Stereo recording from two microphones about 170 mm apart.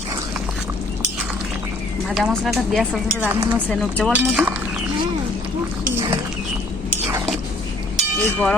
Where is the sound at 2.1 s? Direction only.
Centre (ahead or behind).